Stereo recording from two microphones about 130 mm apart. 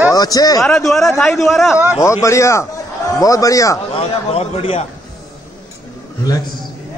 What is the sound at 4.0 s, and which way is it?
Speech, 50° left (ahead or behind).